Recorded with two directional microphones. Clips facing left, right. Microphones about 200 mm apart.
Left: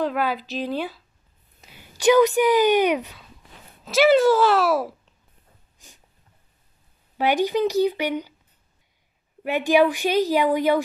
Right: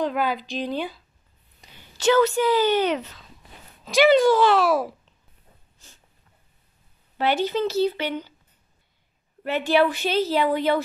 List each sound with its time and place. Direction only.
0.0 s speech: 5° left (ahead or behind)
5.8 s snort: 15° left (ahead or behind)
7.2 s a woman's voice: 15° left (ahead or behind)
9.4 s a woman's voice: 15° left (ahead or behind)